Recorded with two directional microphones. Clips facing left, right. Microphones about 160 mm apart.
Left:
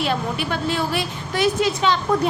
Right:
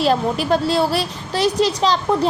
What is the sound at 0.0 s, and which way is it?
A woman's voice, 35° right (ahead or behind).